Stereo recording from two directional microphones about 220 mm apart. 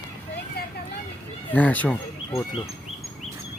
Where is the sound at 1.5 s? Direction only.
5° left (ahead or behind).